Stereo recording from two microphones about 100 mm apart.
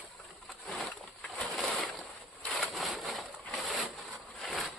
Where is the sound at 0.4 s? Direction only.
Centre (ahead or behind).